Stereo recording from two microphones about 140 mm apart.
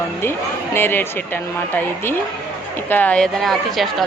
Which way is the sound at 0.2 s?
15° left (ahead or behind).